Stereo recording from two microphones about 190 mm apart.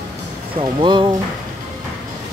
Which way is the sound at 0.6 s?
25° right (ahead or behind).